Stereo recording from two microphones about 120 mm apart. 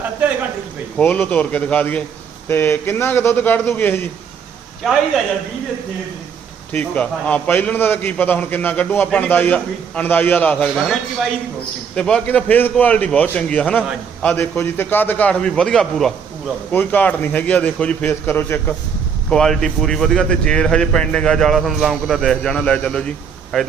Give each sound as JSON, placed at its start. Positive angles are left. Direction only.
{"t": 0.9, "sound": "a man's voice", "side_deg": 15}
{"t": 4.8, "sound": "a man's voice", "side_deg": 0}
{"t": 6.7, "sound": "a man's voice", "side_deg": 10}
{"t": 11.9, "sound": "a man's voice", "side_deg": 10}
{"t": 19.3, "sound": "a man's voice", "side_deg": 5}